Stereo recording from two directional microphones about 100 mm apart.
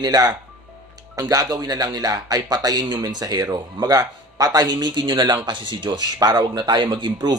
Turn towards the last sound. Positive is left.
turn(degrees=-50)  # may be behind; listen again after turning